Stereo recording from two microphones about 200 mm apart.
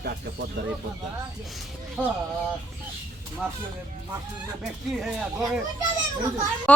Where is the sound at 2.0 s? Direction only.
10° right (ahead or behind).